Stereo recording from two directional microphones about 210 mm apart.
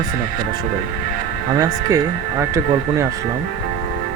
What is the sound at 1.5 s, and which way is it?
Speech, 15° right (ahead or behind).